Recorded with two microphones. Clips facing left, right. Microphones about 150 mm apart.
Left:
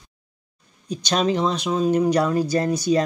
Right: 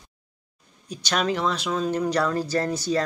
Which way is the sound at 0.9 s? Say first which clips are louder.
Left 4 dB; 20° left (ahead or behind).